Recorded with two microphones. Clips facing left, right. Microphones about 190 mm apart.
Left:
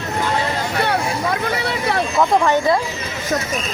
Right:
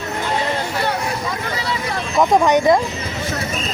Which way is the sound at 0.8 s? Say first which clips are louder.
Left 2 dB; 60° left (ahead or behind).